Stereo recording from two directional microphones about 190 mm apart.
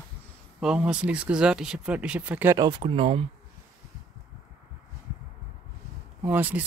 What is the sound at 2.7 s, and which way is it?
Speech, 30° right (ahead or behind).